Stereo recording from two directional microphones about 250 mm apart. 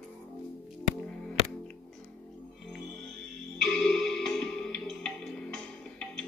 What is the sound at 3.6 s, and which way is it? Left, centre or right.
Music, centre.